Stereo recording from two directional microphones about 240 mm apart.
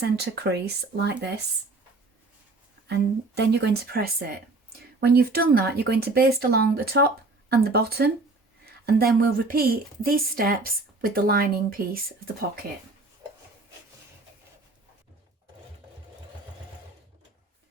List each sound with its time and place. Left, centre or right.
0.0 s speech: right
2.8 s a woman's voice: right